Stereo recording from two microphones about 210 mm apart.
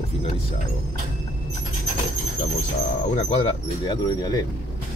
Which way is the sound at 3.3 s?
25° left (ahead or behind).